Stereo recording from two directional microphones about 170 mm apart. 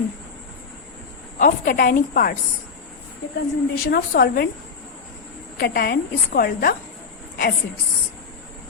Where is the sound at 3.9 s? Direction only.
65° left (ahead or behind).